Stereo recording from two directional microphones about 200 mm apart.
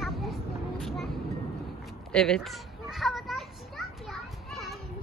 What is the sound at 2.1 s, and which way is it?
Children playing, 5° left (ahead or behind).